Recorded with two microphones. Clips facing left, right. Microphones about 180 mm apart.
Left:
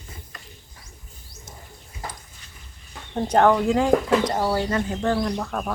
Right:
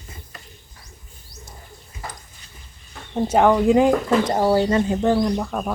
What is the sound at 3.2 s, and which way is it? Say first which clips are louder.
Speech: right 2 dB; 5° right (ahead or behind).